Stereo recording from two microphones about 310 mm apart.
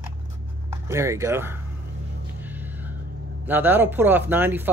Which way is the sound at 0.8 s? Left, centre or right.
Centre.